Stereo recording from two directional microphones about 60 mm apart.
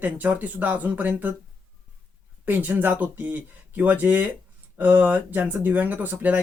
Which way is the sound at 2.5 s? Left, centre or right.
Right.